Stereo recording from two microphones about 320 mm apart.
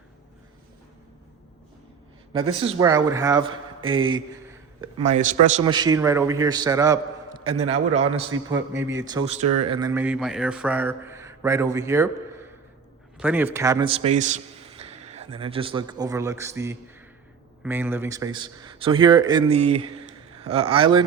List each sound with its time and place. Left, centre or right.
2.4 s a man's voice: centre
8.4 s a man's voice: centre